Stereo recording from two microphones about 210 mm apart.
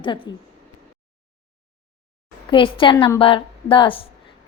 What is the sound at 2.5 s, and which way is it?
A woman's voice, 25° left (ahead or behind).